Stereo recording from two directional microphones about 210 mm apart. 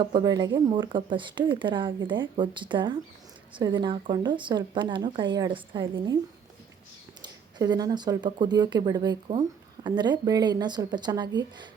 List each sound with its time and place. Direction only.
0.0 s speech: 20° right (ahead or behind)
7.2 s speech: 20° right (ahead or behind)